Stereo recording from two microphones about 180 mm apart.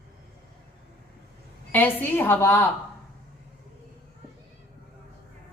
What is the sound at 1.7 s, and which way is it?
A woman's voice, 10° left (ahead or behind).